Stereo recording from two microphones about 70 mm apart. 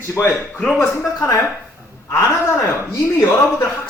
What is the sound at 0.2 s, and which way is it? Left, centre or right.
A man's voice, left.